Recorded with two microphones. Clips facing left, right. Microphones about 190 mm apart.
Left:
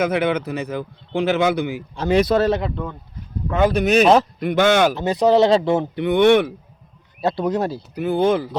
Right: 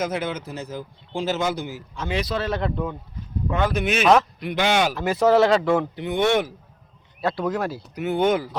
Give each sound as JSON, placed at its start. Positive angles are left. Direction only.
{"t": 0.0, "sound": "speech", "side_deg": 65}
{"t": 2.0, "sound": "speech", "side_deg": 45}
{"t": 2.6, "sound": "speech", "side_deg": 0}
{"t": 3.7, "sound": "speech", "side_deg": 40}
{"t": 4.4, "sound": "speech", "side_deg": 50}
{"t": 4.9, "sound": "speech", "side_deg": 20}
{"t": 6.0, "sound": "speech", "side_deg": 65}
{"t": 7.2, "sound": "speech", "side_deg": 20}